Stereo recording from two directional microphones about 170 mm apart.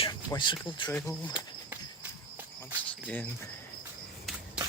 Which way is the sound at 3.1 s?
10° left (ahead or behind).